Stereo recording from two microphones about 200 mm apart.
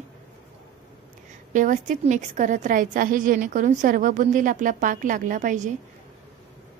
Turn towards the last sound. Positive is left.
turn(degrees=-40)  # may be behind; listen again after turning